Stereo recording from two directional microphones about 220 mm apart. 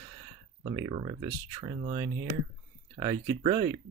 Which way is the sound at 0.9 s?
25° right (ahead or behind).